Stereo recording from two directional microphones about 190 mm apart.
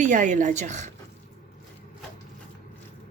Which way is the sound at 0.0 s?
40° right (ahead or behind).